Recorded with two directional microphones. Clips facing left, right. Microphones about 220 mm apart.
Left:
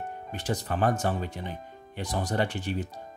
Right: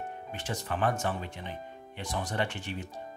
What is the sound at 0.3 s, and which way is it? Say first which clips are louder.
Speech: left 5 dB; 35° left (ahead or behind).